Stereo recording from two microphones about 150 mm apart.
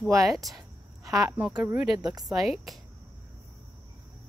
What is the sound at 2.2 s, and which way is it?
Speech, centre (ahead or behind).